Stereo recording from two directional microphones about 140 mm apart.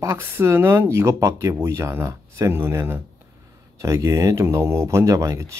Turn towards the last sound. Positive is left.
turn(degrees=-20)  # may be behind; listen again after turning